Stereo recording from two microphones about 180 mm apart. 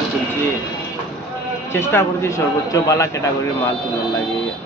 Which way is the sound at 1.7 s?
15° left (ahead or behind).